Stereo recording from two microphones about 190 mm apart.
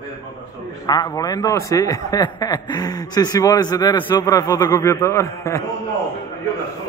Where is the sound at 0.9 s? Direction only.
20° left (ahead or behind).